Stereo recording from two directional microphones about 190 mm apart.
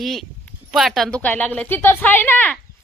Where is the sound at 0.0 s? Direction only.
Centre (ahead or behind).